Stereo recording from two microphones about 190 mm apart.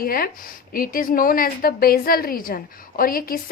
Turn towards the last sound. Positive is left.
turn(degrees=50)  # may be behind; listen again after turning